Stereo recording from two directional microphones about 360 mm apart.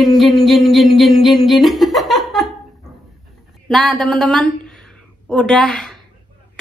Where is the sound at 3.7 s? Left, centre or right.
Centre.